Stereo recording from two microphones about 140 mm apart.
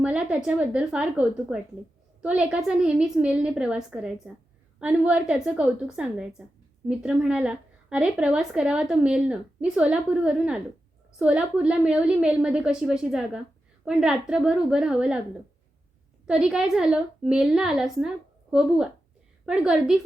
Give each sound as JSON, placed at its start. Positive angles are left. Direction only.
{"t": 0.0, "sound": "a woman's voice", "side_deg": -10}
{"t": 16.2, "sound": "a woman's voice", "side_deg": -5}
{"t": 19.5, "sound": "a woman's voice", "side_deg": -5}